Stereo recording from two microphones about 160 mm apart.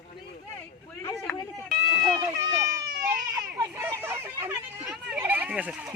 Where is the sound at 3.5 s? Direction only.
20° right (ahead or behind).